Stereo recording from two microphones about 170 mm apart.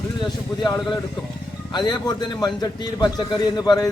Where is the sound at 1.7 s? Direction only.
25° left (ahead or behind).